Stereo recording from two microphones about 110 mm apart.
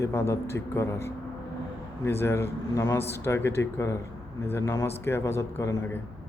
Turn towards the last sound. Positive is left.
turn(degrees=25)  # may be behind; listen again after turning